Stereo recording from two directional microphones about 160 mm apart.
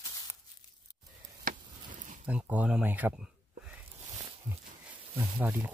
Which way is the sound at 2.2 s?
10° right (ahead or behind).